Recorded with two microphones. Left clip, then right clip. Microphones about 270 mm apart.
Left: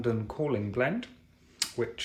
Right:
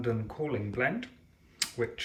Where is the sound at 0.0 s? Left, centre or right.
Centre.